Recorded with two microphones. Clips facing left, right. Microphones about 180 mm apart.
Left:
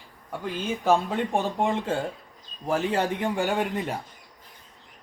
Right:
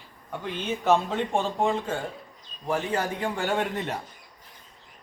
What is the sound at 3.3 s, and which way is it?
Speech, 15° left (ahead or behind).